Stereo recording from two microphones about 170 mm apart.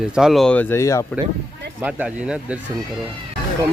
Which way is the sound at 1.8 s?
10° right (ahead or behind).